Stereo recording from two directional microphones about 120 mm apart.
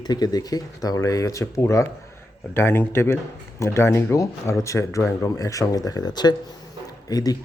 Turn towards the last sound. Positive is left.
turn(degrees=30)  # may be behind; listen again after turning